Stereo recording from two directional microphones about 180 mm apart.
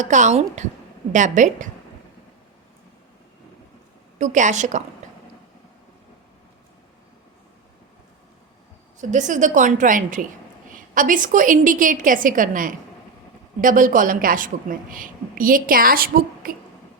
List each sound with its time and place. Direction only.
0.0 s a woman's voice: 40° right (ahead or behind)
4.2 s a woman's voice: 45° right (ahead or behind)
5.0 s a sound: 40° right (ahead or behind)
9.0 s a woman's voice: 45° right (ahead or behind)